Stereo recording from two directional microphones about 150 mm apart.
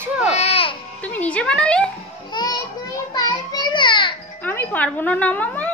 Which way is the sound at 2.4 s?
30° left (ahead or behind).